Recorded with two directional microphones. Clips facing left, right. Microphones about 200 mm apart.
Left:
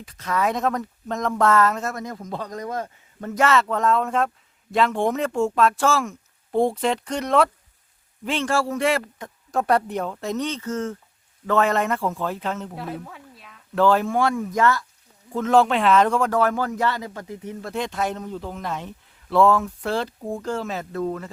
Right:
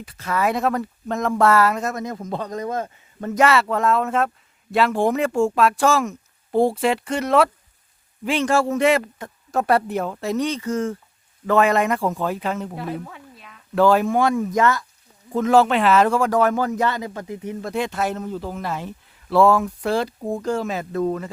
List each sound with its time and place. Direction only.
0.0 s speech: 5° right (ahead or behind)
6.5 s a man's voice: 5° right (ahead or behind)
9.1 s speech: 5° right (ahead or behind)
13.7 s speech: 10° right (ahead or behind)
15.5 s speech: 5° right (ahead or behind)